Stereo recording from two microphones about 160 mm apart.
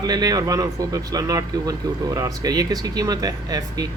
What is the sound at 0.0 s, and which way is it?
A man's voice, 25° right (ahead or behind).